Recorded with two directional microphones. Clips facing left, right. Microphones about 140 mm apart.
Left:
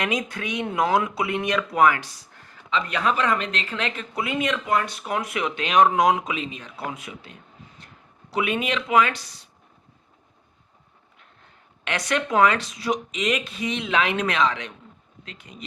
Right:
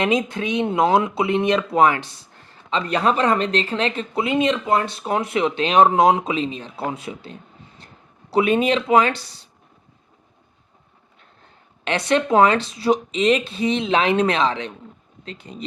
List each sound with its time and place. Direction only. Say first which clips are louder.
0.0 s speech: right 6 dB; 25° right (ahead or behind)
11.9 s speech: right 6 dB; 30° right (ahead or behind)